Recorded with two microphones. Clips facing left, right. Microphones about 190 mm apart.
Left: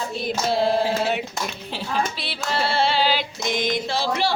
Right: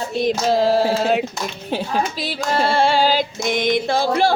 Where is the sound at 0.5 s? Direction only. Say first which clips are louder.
Right 3 dB; 40° right (ahead or behind).